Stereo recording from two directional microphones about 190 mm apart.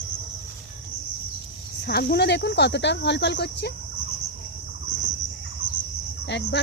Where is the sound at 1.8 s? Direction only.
55° left (ahead or behind).